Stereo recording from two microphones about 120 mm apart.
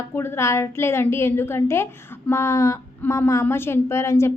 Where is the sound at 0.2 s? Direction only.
20° left (ahead or behind).